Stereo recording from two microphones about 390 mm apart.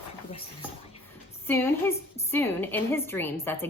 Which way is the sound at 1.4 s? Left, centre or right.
Centre.